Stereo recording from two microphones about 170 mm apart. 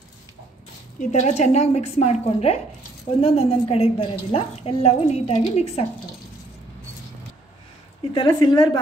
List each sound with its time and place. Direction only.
1.1 s a woman's voice: 40° left (ahead or behind)
8.1 s a woman's voice: 25° left (ahead or behind)